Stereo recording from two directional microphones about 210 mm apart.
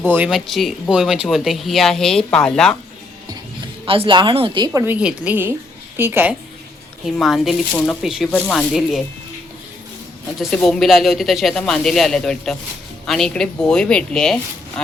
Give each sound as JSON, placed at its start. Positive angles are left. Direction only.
{"t": 0.1, "sound": "speech", "side_deg": -5}
{"t": 3.8, "sound": "a woman's voice", "side_deg": -25}
{"t": 10.5, "sound": "speech", "side_deg": 0}